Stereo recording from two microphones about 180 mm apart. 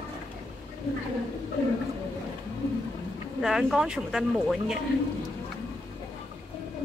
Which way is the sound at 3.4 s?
Centre (ahead or behind).